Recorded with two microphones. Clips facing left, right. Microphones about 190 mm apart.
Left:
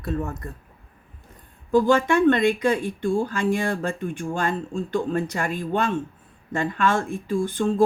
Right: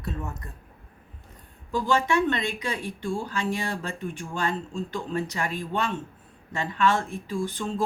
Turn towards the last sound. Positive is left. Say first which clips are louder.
# left 7 dB
turn(degrees=50)  # may be behind; listen again after turning